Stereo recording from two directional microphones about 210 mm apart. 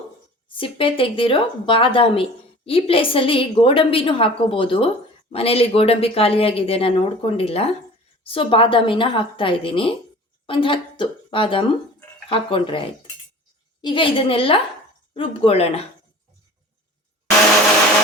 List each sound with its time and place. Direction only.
0.4 s a woman's voice: 25° left (ahead or behind)
13.8 s a woman's voice: 25° left (ahead or behind)